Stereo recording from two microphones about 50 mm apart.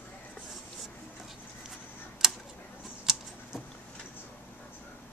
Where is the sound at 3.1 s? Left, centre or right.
Centre.